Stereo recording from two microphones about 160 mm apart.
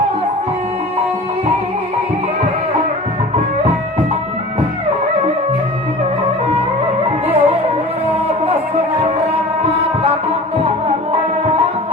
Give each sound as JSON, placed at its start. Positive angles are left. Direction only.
{"t": 7.3, "sound": "music", "side_deg": -40}